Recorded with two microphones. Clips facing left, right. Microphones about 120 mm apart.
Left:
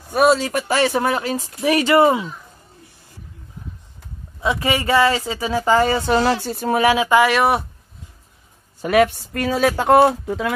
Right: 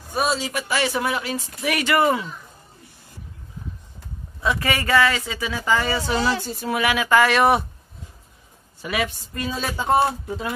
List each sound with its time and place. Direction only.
0.1 s speech: 60° left (ahead or behind); by 2.2 s 25° left (ahead or behind)
4.4 s speech: 20° left (ahead or behind)
5.9 s speech: 55° left (ahead or behind)
6.7 s speech: 35° left (ahead or behind)
7.1 s speech: 10° left (ahead or behind)
8.8 s speech: 55° left (ahead or behind); by 10.5 s 80° left